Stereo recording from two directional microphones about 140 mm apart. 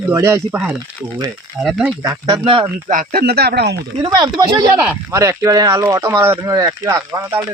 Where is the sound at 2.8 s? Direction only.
70° right (ahead or behind); by 3.3 s 90° right.